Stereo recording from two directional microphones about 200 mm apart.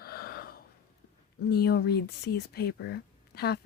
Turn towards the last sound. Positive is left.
turn(degrees=55)  # may be behind; listen again after turning